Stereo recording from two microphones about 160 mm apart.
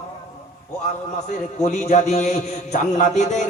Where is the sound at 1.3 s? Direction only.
50° left (ahead or behind).